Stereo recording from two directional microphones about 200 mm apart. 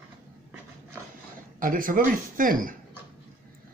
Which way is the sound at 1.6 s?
45° right (ahead or behind).